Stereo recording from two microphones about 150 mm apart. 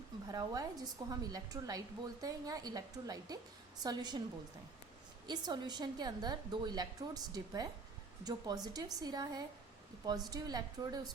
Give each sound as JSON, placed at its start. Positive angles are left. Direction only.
{"t": 0.3, "sound": "a woman's voice", "side_deg": -25}
{"t": 5.2, "sound": "a woman's voice", "side_deg": -30}